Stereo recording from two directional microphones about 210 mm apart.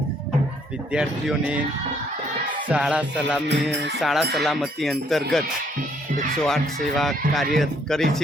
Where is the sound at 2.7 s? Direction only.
5° right (ahead or behind).